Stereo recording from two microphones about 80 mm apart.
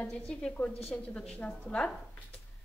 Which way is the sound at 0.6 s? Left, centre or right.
Centre.